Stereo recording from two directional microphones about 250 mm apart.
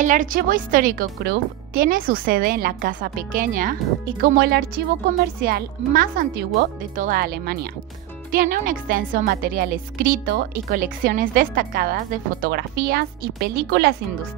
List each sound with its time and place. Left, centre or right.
0.0 s a woman's voice: right